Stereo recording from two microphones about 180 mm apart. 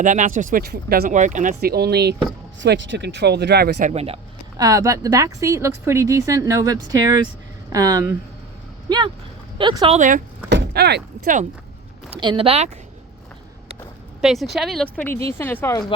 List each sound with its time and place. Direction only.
0.0 s speech: 45° right (ahead or behind); by 2.1 s 65° right (ahead or behind)
2.6 s speech: 80° right; by 3.8 s 65° right (ahead or behind)
3.8 s speech: 40° right (ahead or behind)
4.5 s speech: 20° right (ahead or behind)
9.6 s speech: 25° right (ahead or behind)
10.0 s speech: 45° right (ahead or behind)
10.5 s vehicle: 70° right (ahead or behind)
12.2 s speech: 30° right (ahead or behind)
14.2 s speech: centre (ahead or behind)